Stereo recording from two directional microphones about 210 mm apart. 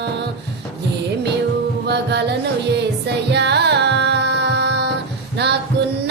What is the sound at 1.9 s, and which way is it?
Music, 55° right (ahead or behind).